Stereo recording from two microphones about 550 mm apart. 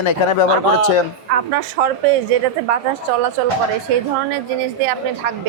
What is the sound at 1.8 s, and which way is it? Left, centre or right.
Speech, right.